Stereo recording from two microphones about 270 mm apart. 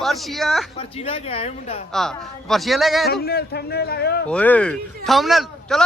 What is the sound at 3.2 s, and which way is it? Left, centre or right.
A man's voice, left.